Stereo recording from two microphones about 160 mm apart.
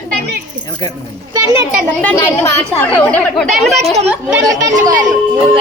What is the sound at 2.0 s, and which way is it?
Speech, 15° left (ahead or behind).